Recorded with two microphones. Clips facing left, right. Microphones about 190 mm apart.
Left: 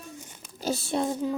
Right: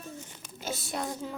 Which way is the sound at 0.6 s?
30° left (ahead or behind).